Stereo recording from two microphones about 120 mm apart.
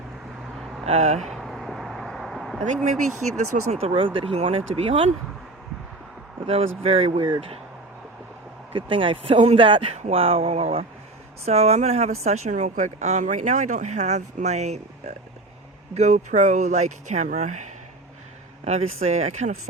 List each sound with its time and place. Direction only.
0.9 s speech: 65° right (ahead or behind)
1.3 s a sound: centre (ahead or behind)
3.2 s speech: centre (ahead or behind)
3.7 s speech: 55° right (ahead or behind)
6.5 s speech: 55° right (ahead or behind)
8.7 s speech: 45° right (ahead or behind); by 17.6 s 85° right
18.6 s speech: 65° right (ahead or behind)